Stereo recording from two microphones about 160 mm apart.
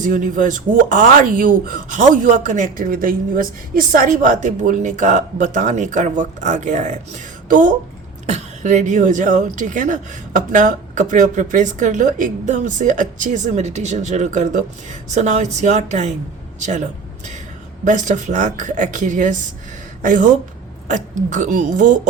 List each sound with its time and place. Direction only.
0.0 s speech: 55° right (ahead or behind)